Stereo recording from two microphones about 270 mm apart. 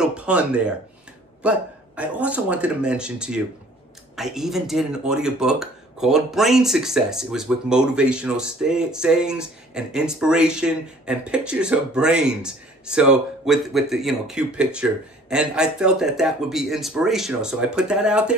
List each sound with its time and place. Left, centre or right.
0.0 s speech: centre